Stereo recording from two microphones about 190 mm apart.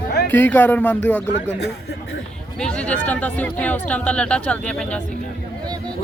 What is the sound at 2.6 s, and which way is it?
Speech, 5° left (ahead or behind).